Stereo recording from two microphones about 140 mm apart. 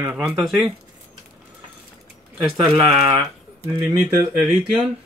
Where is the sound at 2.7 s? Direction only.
Centre (ahead or behind).